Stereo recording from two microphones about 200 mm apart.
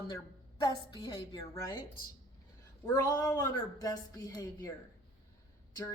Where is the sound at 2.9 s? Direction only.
20° left (ahead or behind).